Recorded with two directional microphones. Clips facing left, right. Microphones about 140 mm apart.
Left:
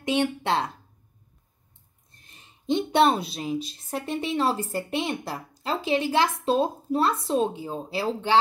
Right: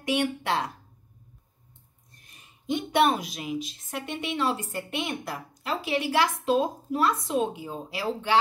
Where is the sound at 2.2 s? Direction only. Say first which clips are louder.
Left 4 dB; 25° left (ahead or behind).